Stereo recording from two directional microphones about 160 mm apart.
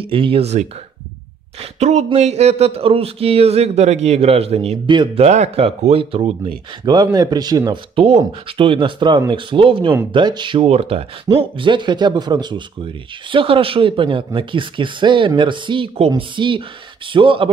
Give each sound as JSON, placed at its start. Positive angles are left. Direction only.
{"t": 0.0, "sound": "speech", "side_deg": -35}